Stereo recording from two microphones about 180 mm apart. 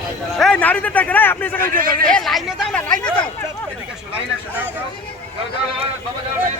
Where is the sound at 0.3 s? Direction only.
5° left (ahead or behind).